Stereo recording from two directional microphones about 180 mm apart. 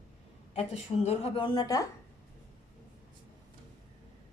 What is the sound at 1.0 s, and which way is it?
Speech, 30° left (ahead or behind).